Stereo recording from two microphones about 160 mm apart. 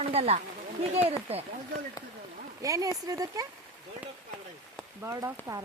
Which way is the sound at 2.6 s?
20° right (ahead or behind).